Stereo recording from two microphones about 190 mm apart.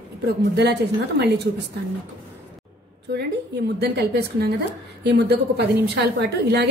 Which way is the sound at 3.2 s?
60° right (ahead or behind).